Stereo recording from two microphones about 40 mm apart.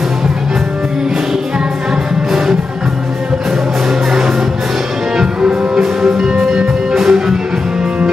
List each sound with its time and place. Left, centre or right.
5.1 s music: centre